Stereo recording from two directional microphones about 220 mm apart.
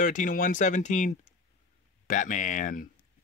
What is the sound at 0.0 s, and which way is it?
Speech, 35° left (ahead or behind).